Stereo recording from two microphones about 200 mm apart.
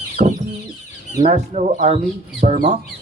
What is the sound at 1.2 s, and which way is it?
Speech, 35° right (ahead or behind).